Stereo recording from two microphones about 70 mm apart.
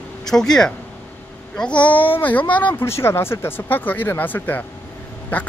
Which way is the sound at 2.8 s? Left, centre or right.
Left.